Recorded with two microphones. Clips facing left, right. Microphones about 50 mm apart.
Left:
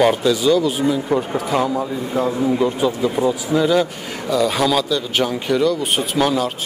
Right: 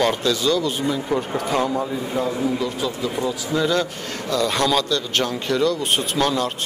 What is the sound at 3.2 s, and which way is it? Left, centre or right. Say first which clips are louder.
Speech: left 4 dB; centre.